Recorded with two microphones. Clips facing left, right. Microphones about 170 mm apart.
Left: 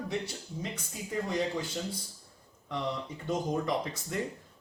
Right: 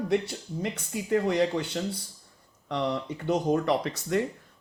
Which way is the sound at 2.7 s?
70° right (ahead or behind).